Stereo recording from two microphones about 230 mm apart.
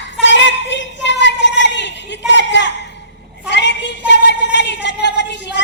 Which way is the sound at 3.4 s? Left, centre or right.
Left.